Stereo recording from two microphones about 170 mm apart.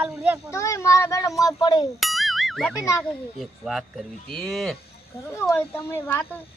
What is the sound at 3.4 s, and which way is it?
Speech, centre (ahead or behind).